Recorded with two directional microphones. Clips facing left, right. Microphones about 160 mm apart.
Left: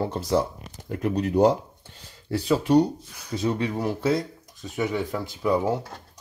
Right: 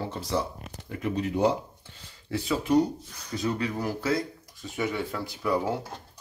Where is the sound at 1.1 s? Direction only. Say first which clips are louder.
Left 5 dB; 40° left (ahead or behind).